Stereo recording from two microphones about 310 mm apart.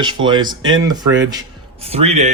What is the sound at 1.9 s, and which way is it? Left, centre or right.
Speech, centre.